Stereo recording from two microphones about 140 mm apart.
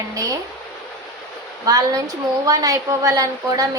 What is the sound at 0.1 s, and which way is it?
Speech, 25° right (ahead or behind).